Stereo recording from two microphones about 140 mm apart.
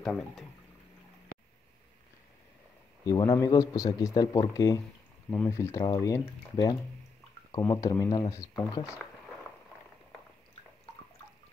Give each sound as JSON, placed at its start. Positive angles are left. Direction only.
{"t": 0.0, "sound": "speech", "side_deg": 5}
{"t": 3.1, "sound": "speech", "side_deg": 25}
{"t": 5.3, "sound": "speech", "side_deg": 15}